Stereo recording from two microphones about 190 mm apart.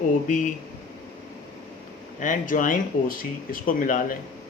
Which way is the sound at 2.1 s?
45° left (ahead or behind).